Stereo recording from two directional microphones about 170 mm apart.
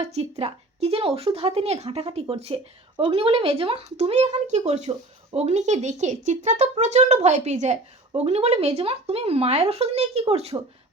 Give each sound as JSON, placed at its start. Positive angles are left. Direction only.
{"t": 0.0, "sound": "speech", "side_deg": -40}